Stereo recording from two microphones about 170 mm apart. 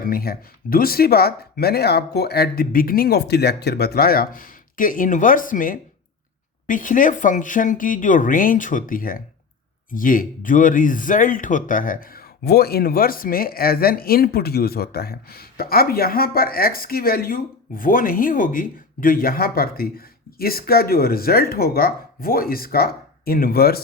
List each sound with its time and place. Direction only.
0.0 s speech: 60° left (ahead or behind)